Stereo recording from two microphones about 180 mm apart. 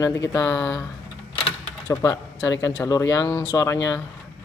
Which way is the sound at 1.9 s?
15° left (ahead or behind).